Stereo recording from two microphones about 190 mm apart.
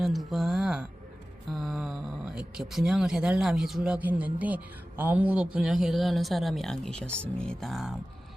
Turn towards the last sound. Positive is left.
turn(degrees=0)  # may be behind; listen again after turning